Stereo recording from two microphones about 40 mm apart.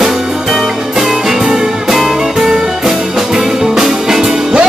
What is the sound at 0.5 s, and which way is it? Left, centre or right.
Music, centre.